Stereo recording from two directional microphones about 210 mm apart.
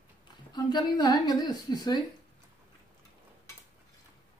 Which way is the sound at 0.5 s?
20° left (ahead or behind).